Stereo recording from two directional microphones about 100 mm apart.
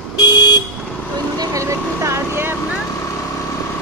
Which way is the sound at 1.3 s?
35° right (ahead or behind).